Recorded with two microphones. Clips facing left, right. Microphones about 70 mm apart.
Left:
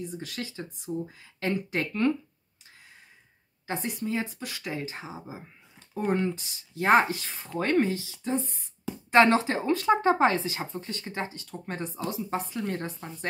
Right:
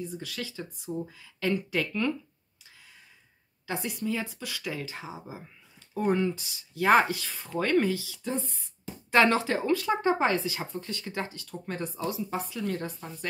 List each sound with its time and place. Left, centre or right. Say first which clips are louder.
0.1 s speech: left 1 dB; left
3.6 s speech: even; left
6.0 s speech: right 1 dB; left